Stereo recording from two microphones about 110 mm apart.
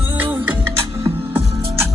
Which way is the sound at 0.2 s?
15° right (ahead or behind).